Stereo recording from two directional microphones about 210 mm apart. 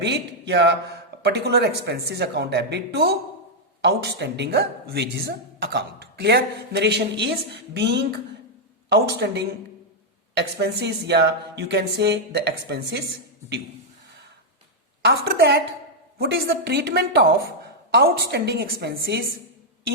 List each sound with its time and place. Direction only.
0.0 s a woman's voice: 55° right (ahead or behind)
15.0 s a woman's voice: 50° right (ahead or behind)